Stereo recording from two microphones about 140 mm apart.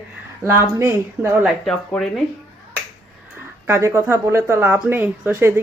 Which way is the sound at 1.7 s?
5° left (ahead or behind).